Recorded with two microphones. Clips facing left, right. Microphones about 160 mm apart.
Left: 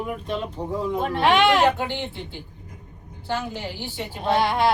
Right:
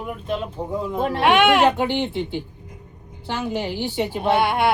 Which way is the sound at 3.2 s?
75° right (ahead or behind).